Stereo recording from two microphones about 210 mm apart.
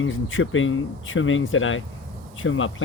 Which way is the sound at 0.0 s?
70° left (ahead or behind).